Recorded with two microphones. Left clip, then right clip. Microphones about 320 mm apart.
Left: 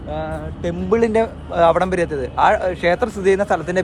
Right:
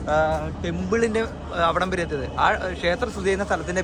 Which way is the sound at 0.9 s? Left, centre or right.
Centre.